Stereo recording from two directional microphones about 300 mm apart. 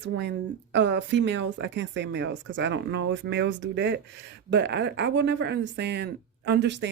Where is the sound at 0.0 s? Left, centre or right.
Right.